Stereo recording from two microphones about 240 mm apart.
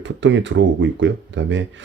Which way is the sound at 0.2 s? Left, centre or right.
Right.